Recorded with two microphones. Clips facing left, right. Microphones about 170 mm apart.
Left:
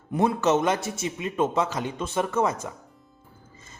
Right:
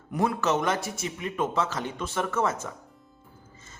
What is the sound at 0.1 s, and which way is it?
A man's voice, 20° left (ahead or behind).